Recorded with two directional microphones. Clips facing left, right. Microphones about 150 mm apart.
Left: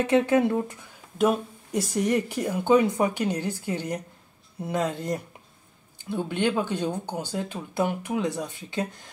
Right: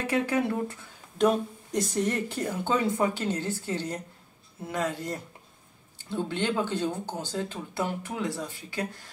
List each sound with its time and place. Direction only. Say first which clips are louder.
0.0 s speech: left 6 dB; 20° left (ahead or behind)
1.1 s speech: left 1 dB; 10° left (ahead or behind)